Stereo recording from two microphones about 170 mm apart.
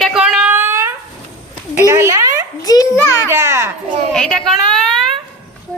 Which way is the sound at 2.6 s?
20° left (ahead or behind).